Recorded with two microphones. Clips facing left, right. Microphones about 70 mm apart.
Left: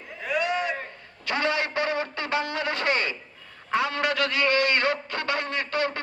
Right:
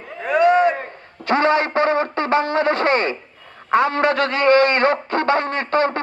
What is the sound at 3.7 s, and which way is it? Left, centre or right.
A man's voice, right.